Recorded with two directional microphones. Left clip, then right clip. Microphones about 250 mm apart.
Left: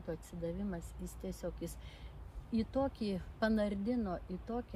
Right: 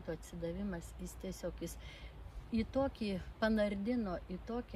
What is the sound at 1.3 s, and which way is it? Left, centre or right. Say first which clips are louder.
Speech: even; centre.